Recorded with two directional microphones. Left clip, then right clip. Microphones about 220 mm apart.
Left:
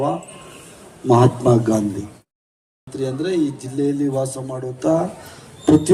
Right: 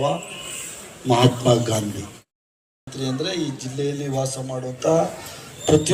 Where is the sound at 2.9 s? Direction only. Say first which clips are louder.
Left 4 dB; 55° left (ahead or behind).